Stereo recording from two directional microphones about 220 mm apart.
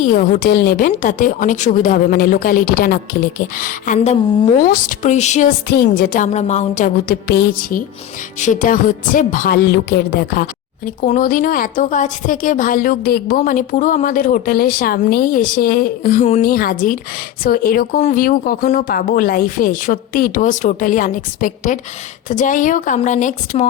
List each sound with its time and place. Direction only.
0.0 s a woman's voice: 35° left (ahead or behind)
5.6 s a woman's voice: 45° left (ahead or behind)